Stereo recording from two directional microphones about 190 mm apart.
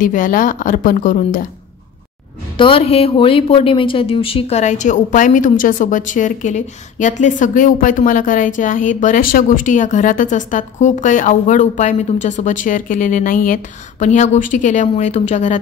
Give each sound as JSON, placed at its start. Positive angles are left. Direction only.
{"t": 0.0, "sound": "a woman's voice", "side_deg": 45}
{"t": 2.5, "sound": "speech", "side_deg": 25}